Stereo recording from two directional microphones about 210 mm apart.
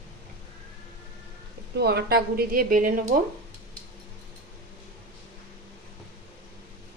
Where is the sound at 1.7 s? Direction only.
50° right (ahead or behind).